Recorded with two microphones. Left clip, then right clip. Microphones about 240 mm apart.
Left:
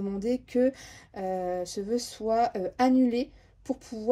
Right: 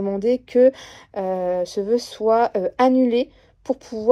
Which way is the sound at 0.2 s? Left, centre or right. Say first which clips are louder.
Right 11 dB; centre.